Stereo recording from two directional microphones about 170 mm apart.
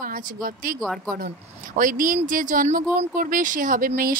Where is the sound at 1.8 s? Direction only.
50° right (ahead or behind).